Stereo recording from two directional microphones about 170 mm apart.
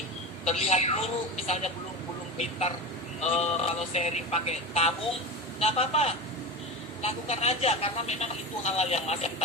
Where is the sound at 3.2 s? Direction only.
40° left (ahead or behind).